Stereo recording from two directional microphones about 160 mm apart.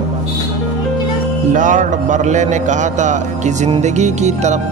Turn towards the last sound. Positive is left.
turn(degrees=-45)  # may be behind; listen again after turning